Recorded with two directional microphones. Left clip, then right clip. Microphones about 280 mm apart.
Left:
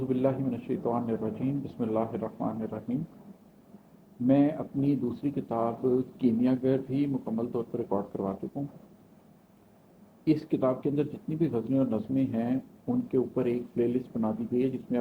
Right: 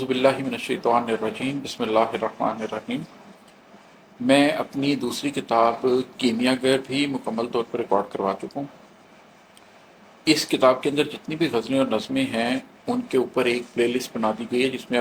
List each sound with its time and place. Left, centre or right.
0.0 s speech: centre
4.3 s speech: centre
10.2 s speech: centre